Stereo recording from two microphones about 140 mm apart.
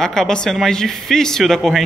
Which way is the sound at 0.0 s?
5° left (ahead or behind).